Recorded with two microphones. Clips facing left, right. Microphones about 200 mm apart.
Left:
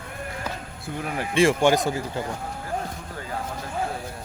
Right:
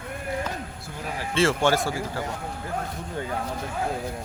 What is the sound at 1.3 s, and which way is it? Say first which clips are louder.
Speech: left 3 dB; 15° left (ahead or behind).